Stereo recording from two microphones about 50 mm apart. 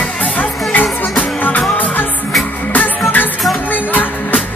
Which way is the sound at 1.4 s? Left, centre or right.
Left.